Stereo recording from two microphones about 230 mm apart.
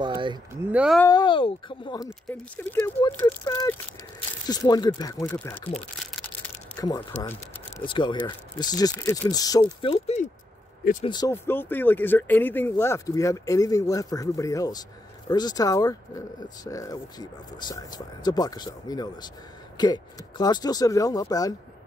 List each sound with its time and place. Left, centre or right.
0.0 s a sound: centre
0.7 s speech: centre
0.9 s speech: centre
2.5 s speech: centre
6.2 s a sound: centre
7.8 s speech: left
10.8 s speech: left
11.1 s speech: centre